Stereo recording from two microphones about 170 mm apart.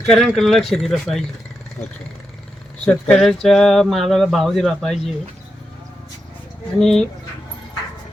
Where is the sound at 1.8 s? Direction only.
45° left (ahead or behind).